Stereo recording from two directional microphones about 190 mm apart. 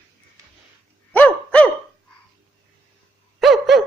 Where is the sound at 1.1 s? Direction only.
5° left (ahead or behind).